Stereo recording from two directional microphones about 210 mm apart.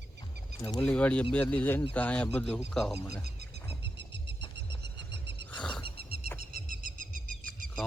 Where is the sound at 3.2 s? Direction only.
50° right (ahead or behind).